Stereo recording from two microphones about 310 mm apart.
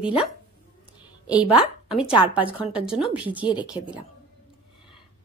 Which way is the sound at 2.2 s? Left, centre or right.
Centre.